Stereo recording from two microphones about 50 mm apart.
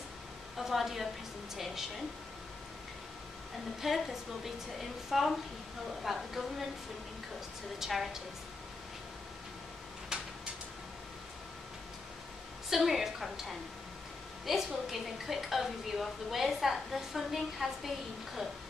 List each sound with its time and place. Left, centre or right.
0.6 s a woman's voice: centre
3.8 s a woman's voice: centre
7.8 s a woman's voice: centre
10.0 s a sound: centre
12.6 s a woman's voice: centre